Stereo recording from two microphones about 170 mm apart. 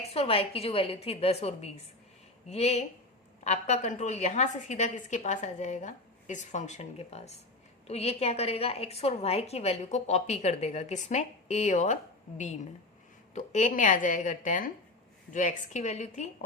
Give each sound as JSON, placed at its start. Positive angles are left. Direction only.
{"t": 0.1, "sound": "a woman's voice", "side_deg": 35}